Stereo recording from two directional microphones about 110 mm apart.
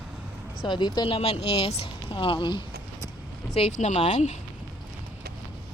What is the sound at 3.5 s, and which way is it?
Speech, 80° left.